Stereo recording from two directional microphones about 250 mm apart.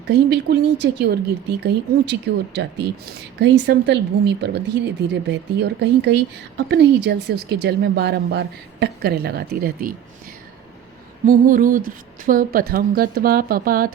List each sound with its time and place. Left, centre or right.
0.1 s speech: right
11.3 s speech: right